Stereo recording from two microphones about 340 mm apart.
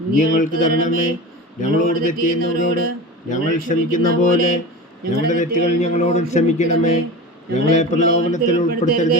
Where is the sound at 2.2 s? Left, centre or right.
Left.